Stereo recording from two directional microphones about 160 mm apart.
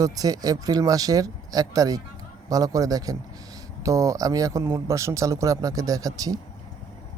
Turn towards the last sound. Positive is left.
turn(degrees=-20)  # may be behind; listen again after turning